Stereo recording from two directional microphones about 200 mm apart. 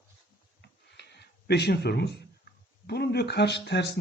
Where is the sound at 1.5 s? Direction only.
55° left (ahead or behind).